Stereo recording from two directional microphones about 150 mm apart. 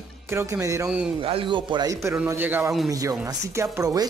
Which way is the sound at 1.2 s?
35° right (ahead or behind).